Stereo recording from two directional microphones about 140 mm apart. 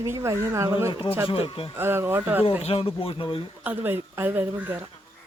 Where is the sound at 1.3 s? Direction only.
40° left (ahead or behind).